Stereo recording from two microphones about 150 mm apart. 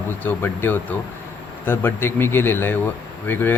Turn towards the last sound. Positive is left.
turn(degrees=15)  # may be behind; listen again after turning